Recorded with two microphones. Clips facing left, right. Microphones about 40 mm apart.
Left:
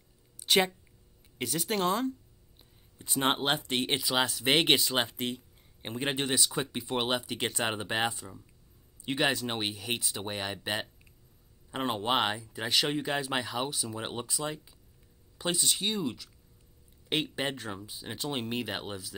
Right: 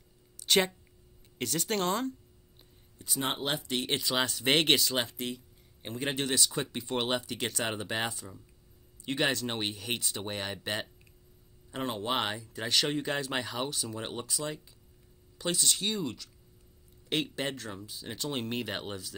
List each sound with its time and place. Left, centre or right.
0.5 s speech: centre
3.0 s speech: left
3.9 s speech: centre
5.0 s a sound: left
5.9 s speech: centre
7.4 s speech: centre
11.7 s speech: left; by 19.1 s centre